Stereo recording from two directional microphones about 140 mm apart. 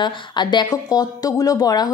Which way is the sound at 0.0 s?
35° left (ahead or behind).